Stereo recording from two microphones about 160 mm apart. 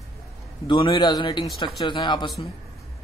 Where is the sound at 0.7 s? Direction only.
30° left (ahead or behind).